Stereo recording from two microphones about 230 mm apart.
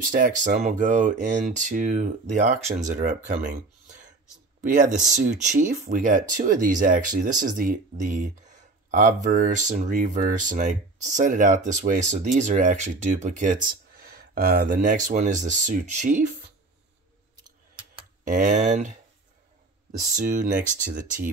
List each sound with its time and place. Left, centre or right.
0.1 s speech: right
4.6 s speech: right
18.2 s speech: right
20.2 s speech: right